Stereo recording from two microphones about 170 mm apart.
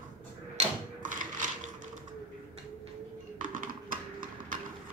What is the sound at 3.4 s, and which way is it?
Typing, 50° right (ahead or behind).